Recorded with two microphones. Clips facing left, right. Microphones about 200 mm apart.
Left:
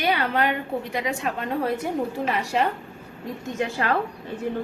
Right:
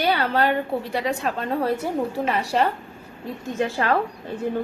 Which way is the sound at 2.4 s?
35° right (ahead or behind).